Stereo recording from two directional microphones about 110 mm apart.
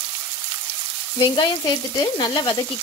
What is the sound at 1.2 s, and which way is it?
Speech, 45° left (ahead or behind).